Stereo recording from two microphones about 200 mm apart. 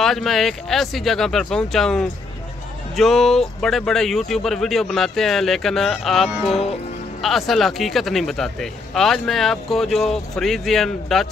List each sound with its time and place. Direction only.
0.0 s speech: centre (ahead or behind)